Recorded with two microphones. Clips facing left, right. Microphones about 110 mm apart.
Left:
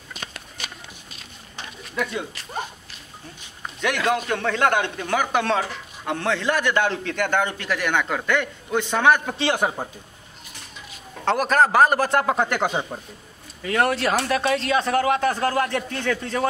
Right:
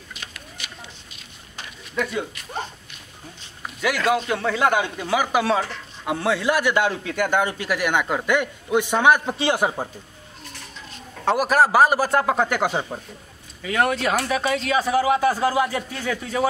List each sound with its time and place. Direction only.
0.1 s run: 40° left (ahead or behind)
2.0 s a man's voice: 5° right (ahead or behind)
3.6 s a man's voice: 5° right (ahead or behind)
11.2 s a man's voice: 5° right (ahead or behind)